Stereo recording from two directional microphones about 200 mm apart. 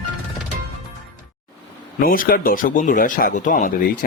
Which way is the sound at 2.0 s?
45° left (ahead or behind).